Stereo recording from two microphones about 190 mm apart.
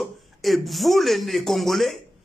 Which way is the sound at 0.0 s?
Centre (ahead or behind).